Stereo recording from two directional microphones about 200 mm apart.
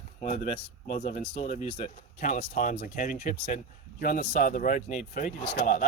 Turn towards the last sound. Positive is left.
turn(degrees=45)  # may be behind; listen again after turning